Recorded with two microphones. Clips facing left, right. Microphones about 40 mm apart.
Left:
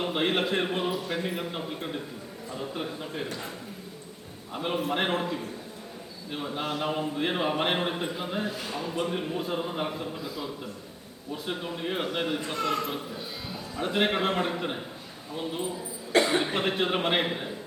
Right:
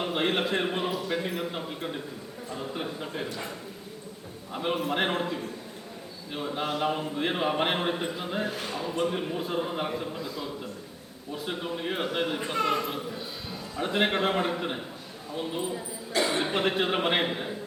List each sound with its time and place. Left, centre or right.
0.0 s a man's voice: centre
4.5 s a man's voice: centre
8.4 s a man's voice: right
8.8 s a man's voice: centre
12.5 s a man's voice: right
12.9 s a man's voice: centre
16.4 s a man's voice: centre